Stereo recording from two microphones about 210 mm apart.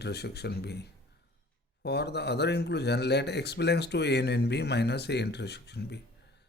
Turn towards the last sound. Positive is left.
turn(degrees=55)  # may be behind; listen again after turning